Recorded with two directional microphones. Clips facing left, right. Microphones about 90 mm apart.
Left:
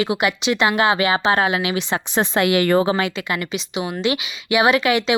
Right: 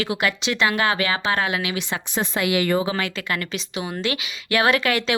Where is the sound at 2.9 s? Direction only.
20° left (ahead or behind).